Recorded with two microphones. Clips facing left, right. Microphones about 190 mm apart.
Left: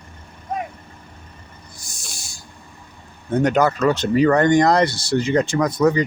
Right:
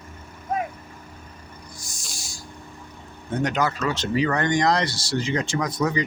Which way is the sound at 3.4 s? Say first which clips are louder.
Left 7 dB; 55° left (ahead or behind).